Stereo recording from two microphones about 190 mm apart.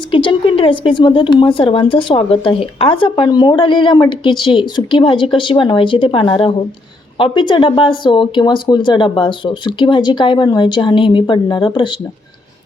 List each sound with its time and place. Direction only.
0.1 s speech: 25° left (ahead or behind)